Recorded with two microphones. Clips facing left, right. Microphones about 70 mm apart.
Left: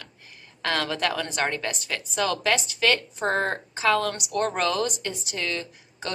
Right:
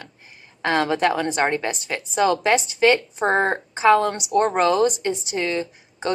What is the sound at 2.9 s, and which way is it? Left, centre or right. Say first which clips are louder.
Speech: right 5 dB; right.